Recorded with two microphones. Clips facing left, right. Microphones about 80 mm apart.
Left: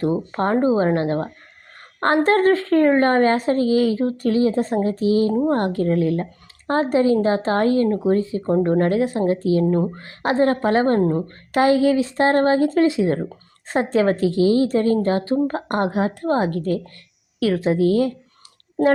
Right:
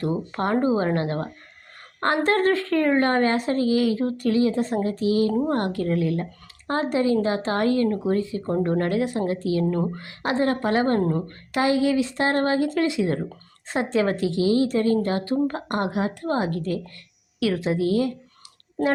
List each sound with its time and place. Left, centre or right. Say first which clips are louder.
0.0 s a woman's voice: left 4 dB; left
11.5 s a woman's voice: left 5 dB; left
13.7 s a woman's voice: left 4 dB; left